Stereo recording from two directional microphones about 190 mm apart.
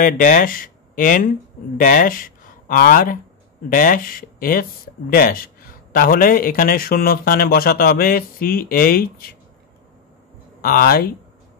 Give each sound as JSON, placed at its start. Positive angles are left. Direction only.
{"t": 0.0, "sound": "a man's voice", "side_deg": 45}
{"t": 10.6, "sound": "a man's voice", "side_deg": 50}